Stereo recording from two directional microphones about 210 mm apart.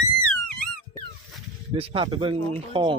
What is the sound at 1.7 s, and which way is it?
Speech, 25° right (ahead or behind).